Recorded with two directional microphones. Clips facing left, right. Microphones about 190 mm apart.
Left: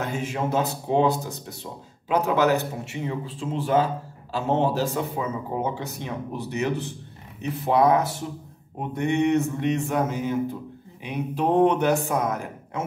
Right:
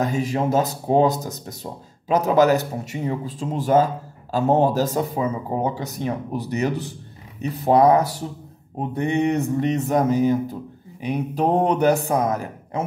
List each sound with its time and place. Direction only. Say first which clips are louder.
0.0 s speech: right 5 dB; 40° right (ahead or behind)